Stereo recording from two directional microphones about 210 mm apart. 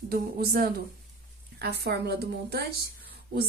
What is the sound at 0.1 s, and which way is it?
Speech, 45° right (ahead or behind).